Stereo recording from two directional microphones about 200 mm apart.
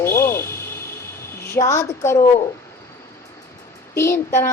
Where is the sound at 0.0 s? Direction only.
15° left (ahead or behind).